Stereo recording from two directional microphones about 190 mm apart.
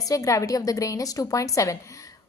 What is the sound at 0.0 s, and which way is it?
A woman's voice, 15° left (ahead or behind).